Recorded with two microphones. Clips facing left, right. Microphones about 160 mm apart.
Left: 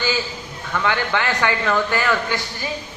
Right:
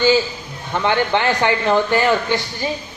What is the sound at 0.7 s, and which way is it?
A man's voice, 25° right (ahead or behind).